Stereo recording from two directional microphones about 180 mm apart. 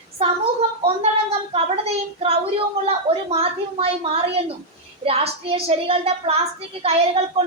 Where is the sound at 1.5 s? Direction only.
35° right (ahead or behind).